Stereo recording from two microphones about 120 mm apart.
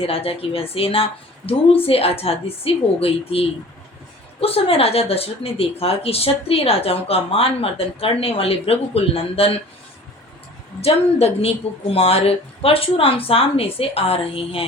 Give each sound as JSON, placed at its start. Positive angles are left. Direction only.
{"t": 0.0, "sound": "speech", "side_deg": 55}
{"t": 10.8, "sound": "speech", "side_deg": 55}